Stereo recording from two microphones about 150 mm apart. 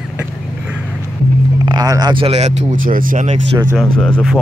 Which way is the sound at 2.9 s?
65° right (ahead or behind).